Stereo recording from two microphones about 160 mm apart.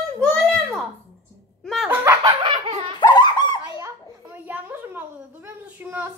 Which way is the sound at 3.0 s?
25° left (ahead or behind).